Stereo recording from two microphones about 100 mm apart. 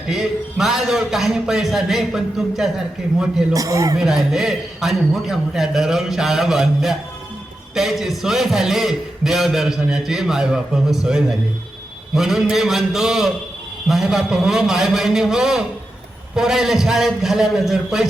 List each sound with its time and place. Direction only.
0.1 s a man's voice: 5° right (ahead or behind)
3.5 s speech: 35° right (ahead or behind)
3.9 s a man's voice: 5° right (ahead or behind)